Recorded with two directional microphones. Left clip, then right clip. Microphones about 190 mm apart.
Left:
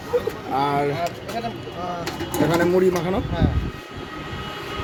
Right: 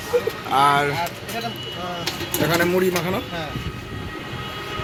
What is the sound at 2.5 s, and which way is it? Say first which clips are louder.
Speech: even; 10° left (ahead or behind).